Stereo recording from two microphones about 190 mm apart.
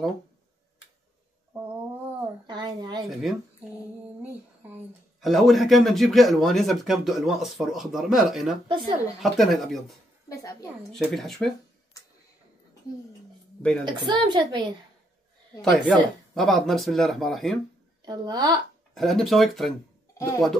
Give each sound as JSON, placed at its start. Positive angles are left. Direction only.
{"t": 2.4, "sound": "a sound", "side_deg": -25}
{"t": 3.0, "sound": "speech", "side_deg": 0}
{"t": 5.2, "sound": "speech", "side_deg": 0}
{"t": 8.6, "sound": "a woman's voice", "side_deg": -25}
{"t": 9.2, "sound": "speech", "side_deg": 0}
{"t": 10.2, "sound": "a sound", "side_deg": 15}
{"t": 10.9, "sound": "speech", "side_deg": 5}
{"t": 13.6, "sound": "a woman's voice", "side_deg": 5}
{"t": 13.8, "sound": "a woman's voice", "side_deg": -25}
{"t": 16.3, "sound": "speech", "side_deg": 0}
{"t": 18.0, "sound": "a woman's voice", "side_deg": -20}
{"t": 18.9, "sound": "speech", "side_deg": 0}
{"t": 20.2, "sound": "speech", "side_deg": 15}